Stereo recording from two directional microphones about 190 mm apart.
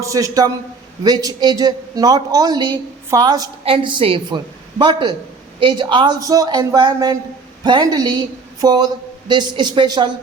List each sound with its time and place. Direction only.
0.0 s a man's voice: 15° right (ahead or behind)